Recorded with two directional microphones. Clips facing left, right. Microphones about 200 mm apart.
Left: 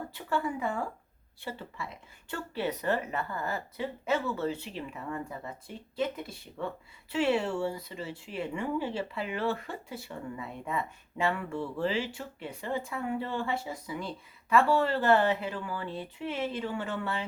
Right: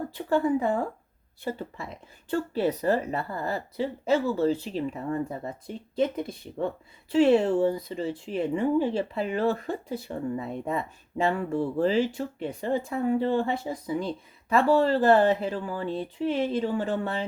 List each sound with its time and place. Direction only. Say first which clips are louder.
0.3 s speech: right 8 dB; 35° right (ahead or behind)